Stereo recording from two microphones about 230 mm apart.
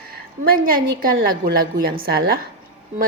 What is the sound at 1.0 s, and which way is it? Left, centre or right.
A woman's voice, right.